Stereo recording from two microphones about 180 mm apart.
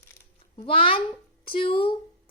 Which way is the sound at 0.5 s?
30° left (ahead or behind).